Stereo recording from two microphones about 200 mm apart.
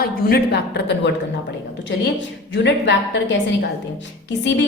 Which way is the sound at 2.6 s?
65° left (ahead or behind).